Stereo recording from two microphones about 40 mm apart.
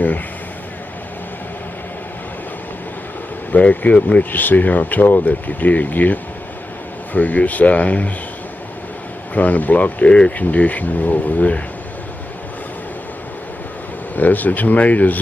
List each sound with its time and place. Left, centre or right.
3.5 s speech: left
7.2 s speech: left
9.3 s speech: left
14.1 s speech: left